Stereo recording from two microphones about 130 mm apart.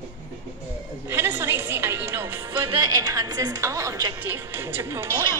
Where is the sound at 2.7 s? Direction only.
30° right (ahead or behind).